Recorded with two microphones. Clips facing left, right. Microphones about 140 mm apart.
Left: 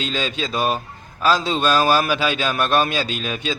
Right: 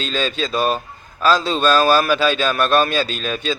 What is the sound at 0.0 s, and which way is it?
Speech, 15° left (ahead or behind).